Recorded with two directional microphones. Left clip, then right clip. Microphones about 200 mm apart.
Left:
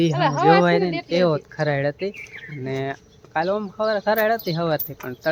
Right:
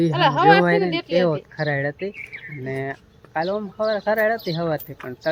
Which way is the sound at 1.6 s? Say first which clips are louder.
Left 1 dB; 15° left (ahead or behind).